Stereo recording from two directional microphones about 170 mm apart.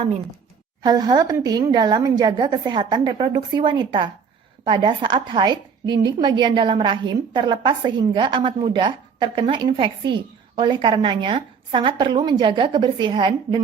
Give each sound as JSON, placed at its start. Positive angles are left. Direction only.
{"t": 0.8, "sound": "a woman's voice", "side_deg": -25}